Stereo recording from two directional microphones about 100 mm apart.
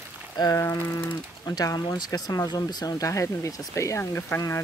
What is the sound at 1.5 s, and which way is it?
Speech, 40° left (ahead or behind).